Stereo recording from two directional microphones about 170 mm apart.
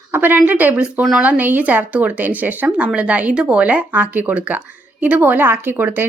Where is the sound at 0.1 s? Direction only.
10° right (ahead or behind).